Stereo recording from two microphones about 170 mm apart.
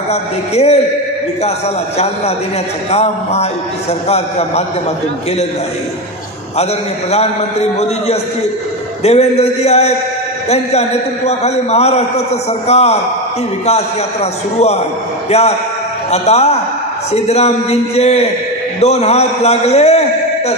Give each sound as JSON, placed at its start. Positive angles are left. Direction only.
{"t": 0.1, "sound": "a man's voice", "side_deg": 40}
{"t": 2.9, "sound": "a man's voice", "side_deg": 40}
{"t": 6.6, "sound": "a man's voice", "side_deg": 40}
{"t": 9.0, "sound": "a man's voice", "side_deg": 40}
{"t": 15.2, "sound": "a man's voice", "side_deg": 40}